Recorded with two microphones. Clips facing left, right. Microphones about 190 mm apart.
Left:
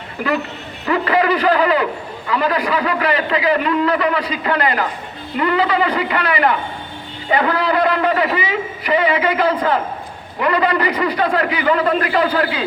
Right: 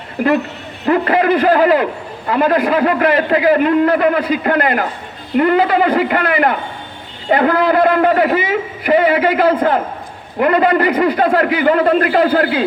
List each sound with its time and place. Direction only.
0.9 s a man's voice: 50° right (ahead or behind)